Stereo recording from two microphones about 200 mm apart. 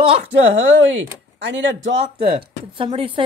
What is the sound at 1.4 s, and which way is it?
Speech, 65° right (ahead or behind).